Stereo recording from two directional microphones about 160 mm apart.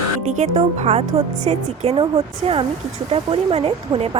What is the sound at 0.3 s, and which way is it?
Speech, 45° right (ahead or behind).